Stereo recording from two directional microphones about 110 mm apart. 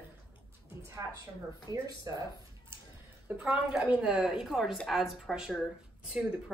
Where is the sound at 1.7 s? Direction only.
30° right (ahead or behind).